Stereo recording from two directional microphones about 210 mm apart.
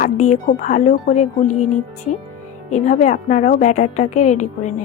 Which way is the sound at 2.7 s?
35° left (ahead or behind).